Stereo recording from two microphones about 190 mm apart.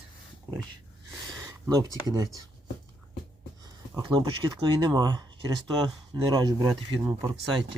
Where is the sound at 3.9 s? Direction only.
25° right (ahead or behind).